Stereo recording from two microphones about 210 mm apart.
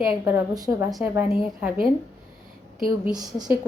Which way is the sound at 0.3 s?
15° right (ahead or behind).